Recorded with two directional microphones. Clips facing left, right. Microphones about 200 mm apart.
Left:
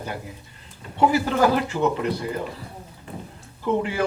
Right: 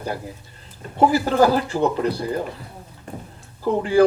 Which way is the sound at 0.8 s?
35° right (ahead or behind).